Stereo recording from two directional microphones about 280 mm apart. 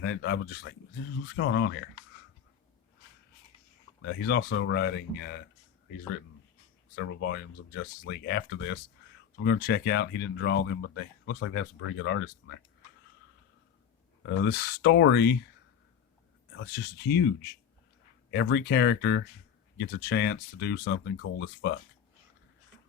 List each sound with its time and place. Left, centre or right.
0.0 s speech: left
4.0 s speech: left
6.9 s speech: left
14.3 s speech: left
16.6 s speech: left